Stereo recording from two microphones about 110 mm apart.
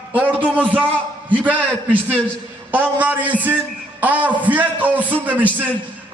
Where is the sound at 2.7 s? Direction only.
15° right (ahead or behind).